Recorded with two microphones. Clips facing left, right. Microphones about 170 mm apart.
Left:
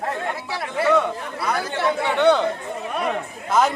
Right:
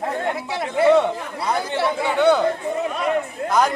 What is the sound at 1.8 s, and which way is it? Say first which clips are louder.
Speech: even; 5° right (ahead or behind).